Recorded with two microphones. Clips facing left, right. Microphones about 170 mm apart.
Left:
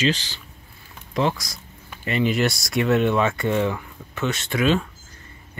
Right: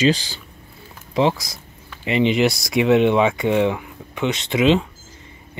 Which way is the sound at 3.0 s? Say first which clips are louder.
Right 4 dB; 15° right (ahead or behind).